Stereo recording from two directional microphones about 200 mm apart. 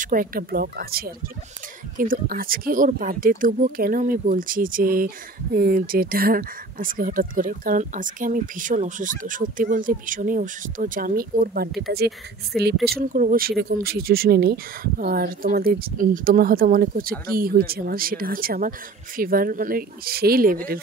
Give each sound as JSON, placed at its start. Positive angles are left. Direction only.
{"t": 0.0, "sound": "speech", "side_deg": -45}
{"t": 12.5, "sound": "speech", "side_deg": 0}
{"t": 12.9, "sound": "speech", "side_deg": -45}